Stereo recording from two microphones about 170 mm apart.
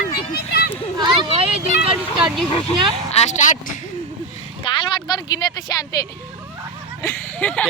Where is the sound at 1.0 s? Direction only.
30° right (ahead or behind).